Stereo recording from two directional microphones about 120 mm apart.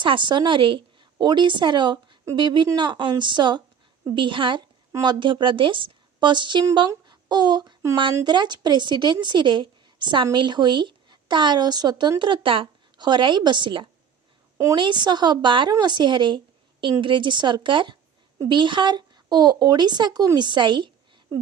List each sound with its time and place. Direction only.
0.0 s a woman's voice: 45° right (ahead or behind)